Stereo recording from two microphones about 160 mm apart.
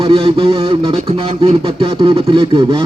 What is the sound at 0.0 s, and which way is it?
Speech, 35° right (ahead or behind).